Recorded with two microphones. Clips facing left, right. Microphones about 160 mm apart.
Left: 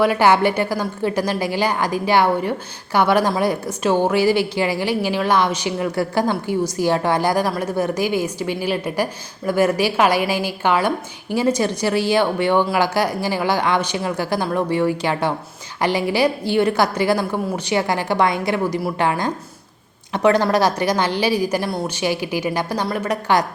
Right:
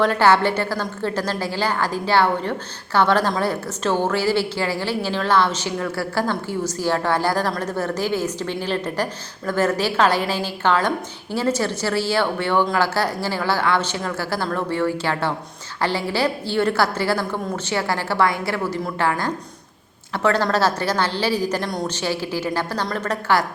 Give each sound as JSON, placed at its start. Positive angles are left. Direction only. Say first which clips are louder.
{"t": 0.0, "sound": "a woman's voice", "louder": "left 2 dB", "side_deg": 10}